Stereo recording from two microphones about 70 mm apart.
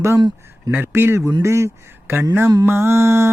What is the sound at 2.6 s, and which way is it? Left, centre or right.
Mantra, right.